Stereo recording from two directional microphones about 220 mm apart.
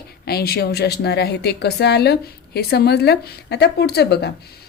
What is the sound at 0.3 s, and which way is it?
A woman's voice, 45° left (ahead or behind).